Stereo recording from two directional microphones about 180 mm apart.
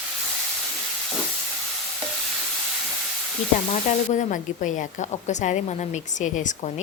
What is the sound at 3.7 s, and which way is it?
Speech, 45° left (ahead or behind).